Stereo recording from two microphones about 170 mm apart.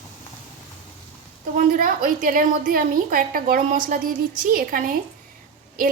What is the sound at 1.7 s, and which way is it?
A woman's voice, 60° right (ahead or behind).